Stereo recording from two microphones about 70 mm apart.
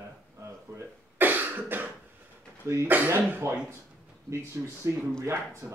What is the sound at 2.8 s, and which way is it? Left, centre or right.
Speech, right.